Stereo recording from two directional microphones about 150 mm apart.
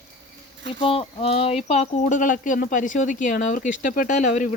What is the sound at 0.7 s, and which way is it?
Speech, 35° left (ahead or behind).